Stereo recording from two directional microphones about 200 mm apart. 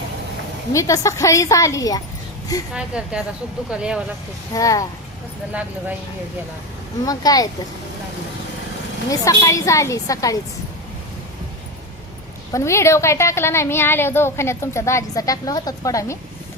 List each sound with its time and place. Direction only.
0.7 s a woman's voice: 15° left (ahead or behind)
2.7 s a woman's voice: 5° right (ahead or behind)
4.5 s a woman's voice: 15° left (ahead or behind)
7.0 s a child's voice: 20° left (ahead or behind)
9.0 s a woman's voice: 15° left (ahead or behind)
12.5 s a woman's voice: 15° left (ahead or behind)